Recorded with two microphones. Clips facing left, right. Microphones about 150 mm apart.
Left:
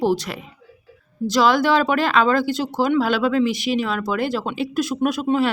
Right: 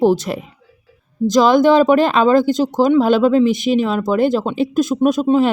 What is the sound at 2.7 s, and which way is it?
Speech, 20° right (ahead or behind).